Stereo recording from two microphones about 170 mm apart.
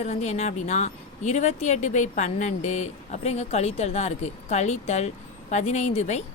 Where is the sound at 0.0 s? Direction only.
40° left (ahead or behind).